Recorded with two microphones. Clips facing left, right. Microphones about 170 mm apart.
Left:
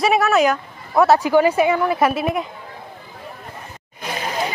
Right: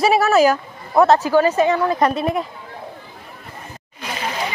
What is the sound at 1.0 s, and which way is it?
Speech, 10° left (ahead or behind).